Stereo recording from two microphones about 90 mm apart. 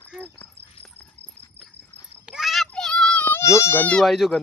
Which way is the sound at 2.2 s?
5° right (ahead or behind).